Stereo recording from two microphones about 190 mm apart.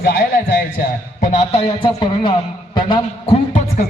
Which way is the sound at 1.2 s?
40° left (ahead or behind).